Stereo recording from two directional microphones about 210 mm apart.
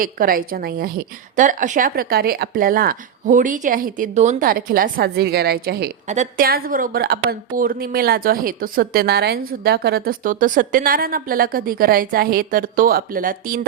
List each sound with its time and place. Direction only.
0.0 s a woman's voice: 40° right (ahead or behind)